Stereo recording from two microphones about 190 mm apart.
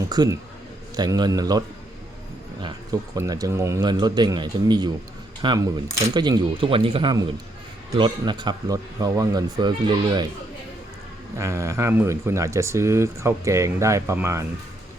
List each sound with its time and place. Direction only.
0.1 s a man's voice: 20° right (ahead or behind)
3.2 s a man's voice: 20° right (ahead or behind)
11.3 s speech: 15° right (ahead or behind)